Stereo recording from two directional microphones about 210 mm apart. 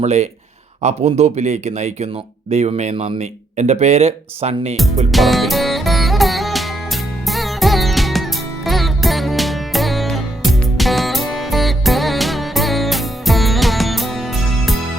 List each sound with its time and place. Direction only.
0.0 s speech: 30° right (ahead or behind)
5.1 s music: centre (ahead or behind)